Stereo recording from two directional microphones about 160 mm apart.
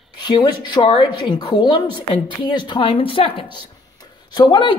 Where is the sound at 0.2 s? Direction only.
30° left (ahead or behind).